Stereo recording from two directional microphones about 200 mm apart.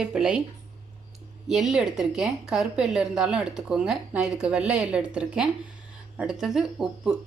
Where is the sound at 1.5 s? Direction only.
Centre (ahead or behind).